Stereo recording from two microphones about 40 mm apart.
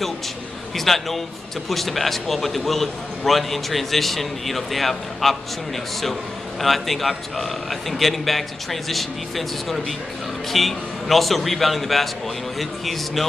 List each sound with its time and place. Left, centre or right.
0.7 s a man's voice: centre
6.6 s a man's voice: centre